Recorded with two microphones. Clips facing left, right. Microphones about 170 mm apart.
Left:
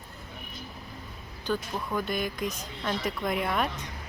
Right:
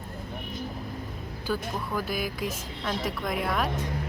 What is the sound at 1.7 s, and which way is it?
A woman's voice, 5° right (ahead or behind).